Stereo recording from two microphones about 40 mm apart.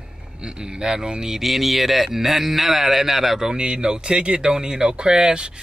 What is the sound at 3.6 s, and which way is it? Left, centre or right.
Speech, right.